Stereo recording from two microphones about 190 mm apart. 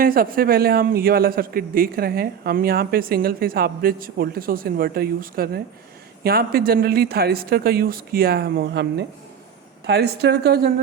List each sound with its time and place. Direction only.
0.0 s a man's voice: 50° right (ahead or behind)